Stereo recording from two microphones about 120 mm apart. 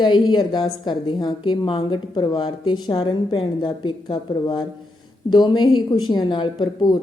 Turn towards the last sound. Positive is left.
turn(degrees=40)  # may be behind; listen again after turning